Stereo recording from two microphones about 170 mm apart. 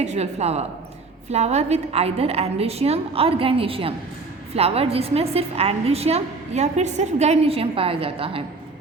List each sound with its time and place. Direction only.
0.0 s a woman's voice: 40° right (ahead or behind)